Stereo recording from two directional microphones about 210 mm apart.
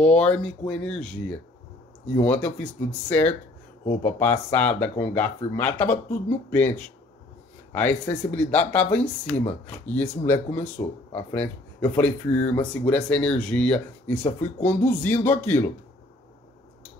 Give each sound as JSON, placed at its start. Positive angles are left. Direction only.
{"t": 0.0, "sound": "speech", "side_deg": 5}